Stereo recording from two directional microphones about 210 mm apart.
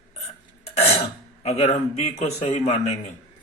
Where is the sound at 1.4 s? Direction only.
30° left (ahead or behind).